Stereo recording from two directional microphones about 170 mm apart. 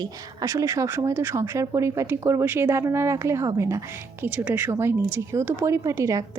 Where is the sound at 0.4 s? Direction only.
20° right (ahead or behind).